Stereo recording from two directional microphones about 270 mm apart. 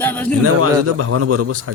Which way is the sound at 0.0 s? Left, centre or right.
Centre.